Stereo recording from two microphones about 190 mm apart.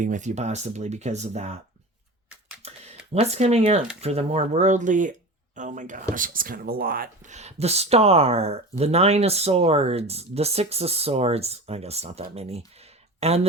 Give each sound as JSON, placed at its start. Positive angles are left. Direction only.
{"t": 0.0, "sound": "speech", "side_deg": -40}
{"t": 3.1, "sound": "speech", "side_deg": -35}